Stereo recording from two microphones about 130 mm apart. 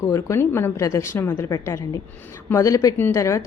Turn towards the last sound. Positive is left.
turn(degrees=25)  # may be behind; listen again after turning